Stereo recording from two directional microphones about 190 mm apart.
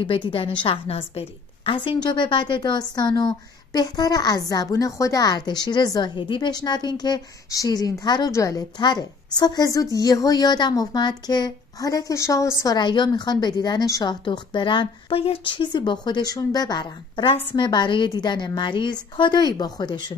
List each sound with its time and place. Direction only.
0.0 s a woman's voice: 25° left (ahead or behind)